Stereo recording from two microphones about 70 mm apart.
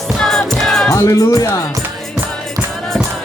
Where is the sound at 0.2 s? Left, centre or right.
Centre.